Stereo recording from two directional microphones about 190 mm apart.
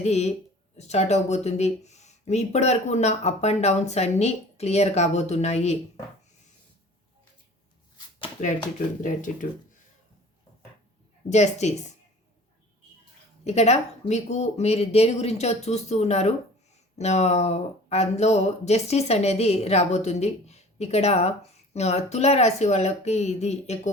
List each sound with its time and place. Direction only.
0.0 s speech: 35° left (ahead or behind)
9.0 s speech: 40° left (ahead or behind)
11.3 s speech: 35° left (ahead or behind)
13.4 s a woman's voice: 35° left (ahead or behind)